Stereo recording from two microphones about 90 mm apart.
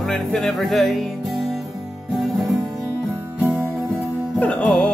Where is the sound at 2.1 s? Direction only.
Centre (ahead or behind).